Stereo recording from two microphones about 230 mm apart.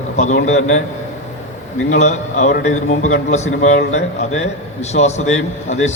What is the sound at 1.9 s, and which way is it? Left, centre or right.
A man's voice, left.